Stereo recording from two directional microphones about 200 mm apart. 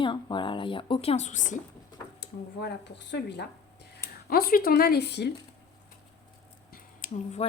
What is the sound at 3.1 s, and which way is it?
Speech, 60° left (ahead or behind).